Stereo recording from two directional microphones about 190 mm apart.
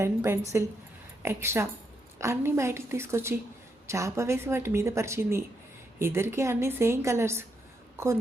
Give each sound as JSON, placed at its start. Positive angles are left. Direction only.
{"t": 0.0, "sound": "a woman's voice", "side_deg": -15}